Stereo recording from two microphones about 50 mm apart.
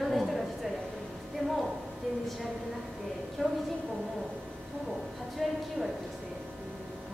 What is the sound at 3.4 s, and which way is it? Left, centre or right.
Speech, centre.